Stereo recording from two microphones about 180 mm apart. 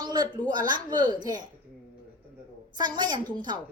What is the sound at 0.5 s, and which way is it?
Speech, 25° right (ahead or behind).